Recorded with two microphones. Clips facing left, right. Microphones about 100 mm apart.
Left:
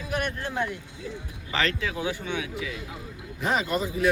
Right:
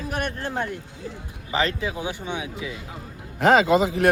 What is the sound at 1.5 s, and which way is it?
Speech, 15° right (ahead or behind).